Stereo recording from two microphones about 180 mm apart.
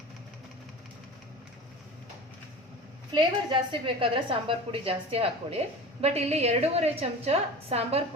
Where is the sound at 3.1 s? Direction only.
25° right (ahead or behind).